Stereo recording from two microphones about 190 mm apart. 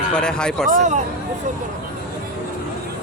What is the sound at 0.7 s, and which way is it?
Speech, 40° right (ahead or behind).